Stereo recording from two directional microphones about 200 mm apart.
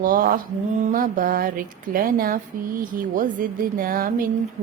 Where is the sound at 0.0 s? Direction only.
45° right (ahead or behind).